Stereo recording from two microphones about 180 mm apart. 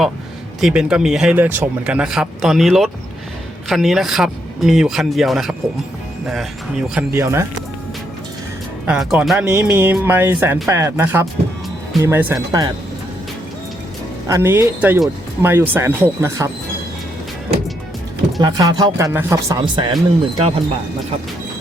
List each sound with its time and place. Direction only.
0.6 s speech: 5° right (ahead or behind)
7.1 s speech: 15° right (ahead or behind)
8.9 s speech: 5° right (ahead or behind); by 12.7 s 20° right (ahead or behind)
14.3 s speech: 15° right (ahead or behind)
18.3 s speech: 20° right (ahead or behind)